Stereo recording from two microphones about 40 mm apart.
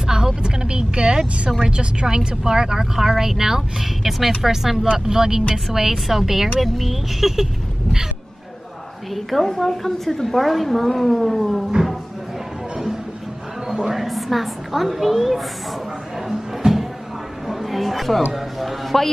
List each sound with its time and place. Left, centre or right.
0.0 s vehicle: centre
1.6 s a woman's voice: right; by 7.4 s centre
9.4 s a woman's voice: centre
12.7 s a sound: centre
13.8 s a woman's voice: centre
16.3 s music: centre
17.5 s a sound: centre
18.3 s a woman's voice: centre